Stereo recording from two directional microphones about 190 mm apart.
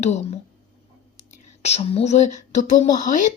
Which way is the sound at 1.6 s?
35° left (ahead or behind).